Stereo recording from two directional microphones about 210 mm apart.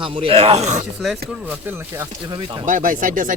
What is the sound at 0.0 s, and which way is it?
Speech, 25° right (ahead or behind).